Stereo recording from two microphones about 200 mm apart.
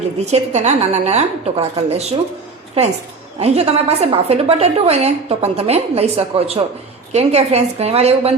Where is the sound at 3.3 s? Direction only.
30° right (ahead or behind).